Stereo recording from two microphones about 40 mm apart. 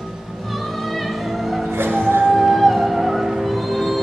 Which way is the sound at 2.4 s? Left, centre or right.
Centre.